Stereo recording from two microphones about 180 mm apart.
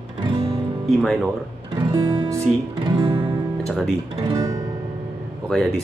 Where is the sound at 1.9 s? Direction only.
25° right (ahead or behind).